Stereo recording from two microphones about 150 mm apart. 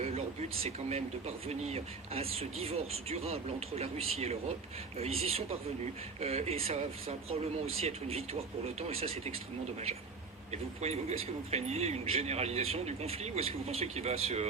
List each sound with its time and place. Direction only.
0.6 s speech: 45° right (ahead or behind)
10.5 s speech: 45° right (ahead or behind)